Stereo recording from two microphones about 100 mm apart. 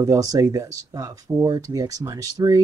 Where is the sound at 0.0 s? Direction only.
35° right (ahead or behind).